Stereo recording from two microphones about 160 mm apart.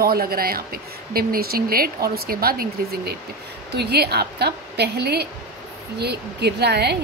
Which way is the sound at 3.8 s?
90° right.